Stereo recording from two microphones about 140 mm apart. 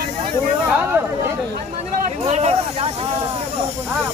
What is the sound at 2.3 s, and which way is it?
Vehicle, 50° right (ahead or behind).